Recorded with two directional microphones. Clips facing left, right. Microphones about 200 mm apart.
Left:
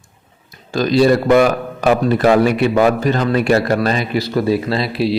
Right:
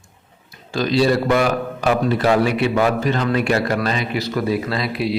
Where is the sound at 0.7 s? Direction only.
45° left (ahead or behind).